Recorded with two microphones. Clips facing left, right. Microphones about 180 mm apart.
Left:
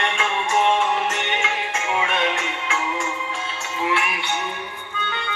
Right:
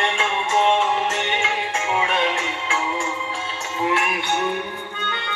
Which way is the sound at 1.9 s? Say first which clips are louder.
Right 1 dB; 30° right (ahead or behind).